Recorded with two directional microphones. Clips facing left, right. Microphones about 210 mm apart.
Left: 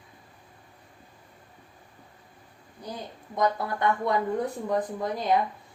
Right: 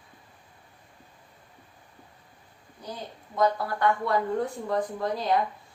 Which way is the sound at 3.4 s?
20° left (ahead or behind).